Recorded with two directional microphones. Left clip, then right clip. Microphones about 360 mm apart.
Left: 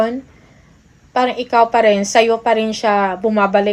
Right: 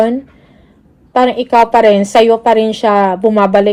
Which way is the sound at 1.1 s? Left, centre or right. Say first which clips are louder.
Right 5 dB; right.